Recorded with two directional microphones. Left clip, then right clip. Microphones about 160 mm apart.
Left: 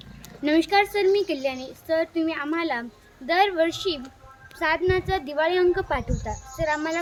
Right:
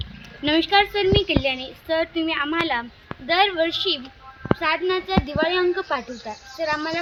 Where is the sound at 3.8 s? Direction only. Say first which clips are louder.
Right 4 dB; 70° left (ahead or behind).